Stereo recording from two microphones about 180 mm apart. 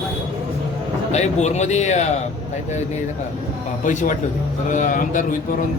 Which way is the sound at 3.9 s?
45° left (ahead or behind).